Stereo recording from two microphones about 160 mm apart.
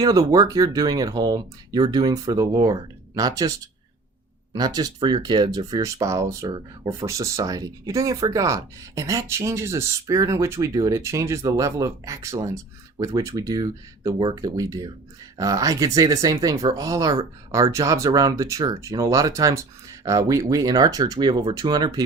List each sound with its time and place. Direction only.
0.0 s speech: 25° right (ahead or behind)
4.5 s speech: 25° right (ahead or behind)